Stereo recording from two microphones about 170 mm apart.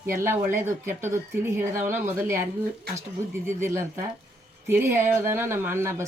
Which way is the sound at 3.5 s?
15° right (ahead or behind).